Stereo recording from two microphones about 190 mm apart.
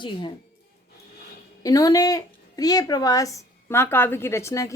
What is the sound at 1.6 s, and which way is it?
A woman's voice, 20° left (ahead or behind).